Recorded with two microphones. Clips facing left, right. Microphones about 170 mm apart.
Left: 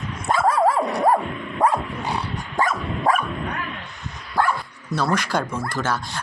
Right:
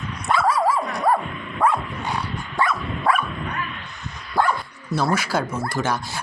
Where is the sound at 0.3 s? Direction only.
50° left (ahead or behind).